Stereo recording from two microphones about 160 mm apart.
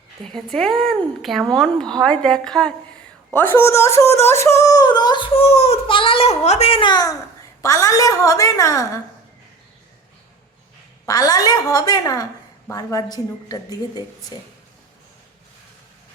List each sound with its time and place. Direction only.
0.3 s a woman's voice: 5° left (ahead or behind); by 9.0 s 20° left (ahead or behind)
11.0 s speech: 20° left (ahead or behind)